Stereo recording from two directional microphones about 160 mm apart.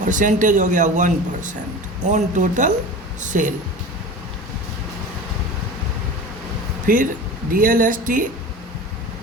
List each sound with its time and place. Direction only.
0.0 s a man's voice: 55° right (ahead or behind)
6.8 s speech: 55° right (ahead or behind)